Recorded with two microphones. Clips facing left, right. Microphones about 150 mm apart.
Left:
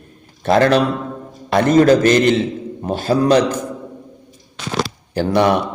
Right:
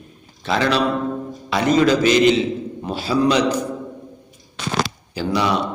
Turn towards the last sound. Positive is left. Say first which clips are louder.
# left 5 dB
turn(degrees=55)  # may be behind; listen again after turning